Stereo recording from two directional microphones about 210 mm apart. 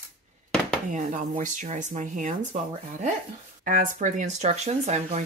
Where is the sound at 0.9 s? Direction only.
35° right (ahead or behind).